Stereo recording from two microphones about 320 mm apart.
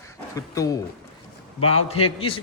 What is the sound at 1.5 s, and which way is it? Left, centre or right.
Speech, left.